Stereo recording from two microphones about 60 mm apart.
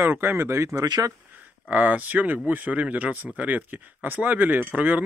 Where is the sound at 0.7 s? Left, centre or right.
Right.